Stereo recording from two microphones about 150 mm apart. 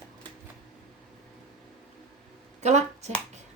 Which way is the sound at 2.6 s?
50° right (ahead or behind).